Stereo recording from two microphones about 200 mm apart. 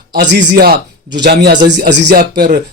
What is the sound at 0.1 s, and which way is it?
A man's voice, 50° right (ahead or behind).